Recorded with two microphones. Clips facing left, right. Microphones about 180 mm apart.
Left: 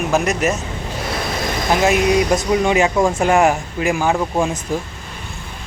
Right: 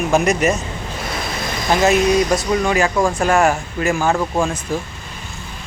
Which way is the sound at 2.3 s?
20° left (ahead or behind).